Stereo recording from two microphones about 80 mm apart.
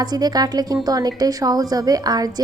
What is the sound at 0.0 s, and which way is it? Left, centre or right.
A woman's voice, right.